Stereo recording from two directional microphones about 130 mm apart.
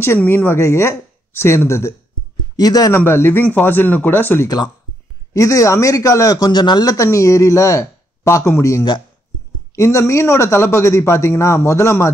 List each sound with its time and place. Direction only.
0.0 s a man's voice: 20° left (ahead or behind)
3.0 s a man's voice: 20° left (ahead or behind)